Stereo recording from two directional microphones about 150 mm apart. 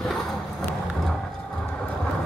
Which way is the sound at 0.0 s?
Centre (ahead or behind).